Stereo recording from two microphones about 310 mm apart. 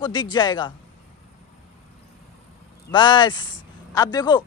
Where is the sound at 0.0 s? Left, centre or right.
Centre.